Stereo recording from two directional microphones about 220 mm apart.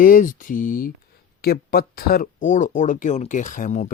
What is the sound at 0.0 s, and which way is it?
Speech, 40° left (ahead or behind).